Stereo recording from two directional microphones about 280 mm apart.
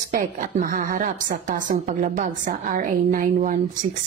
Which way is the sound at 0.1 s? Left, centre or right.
Right.